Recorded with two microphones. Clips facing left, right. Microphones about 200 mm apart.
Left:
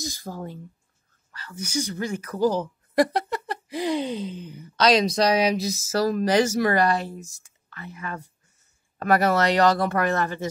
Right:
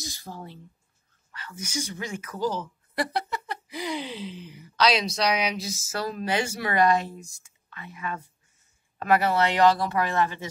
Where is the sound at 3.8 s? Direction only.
40° left (ahead or behind).